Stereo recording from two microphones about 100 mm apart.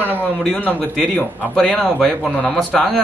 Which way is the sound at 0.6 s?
10° left (ahead or behind).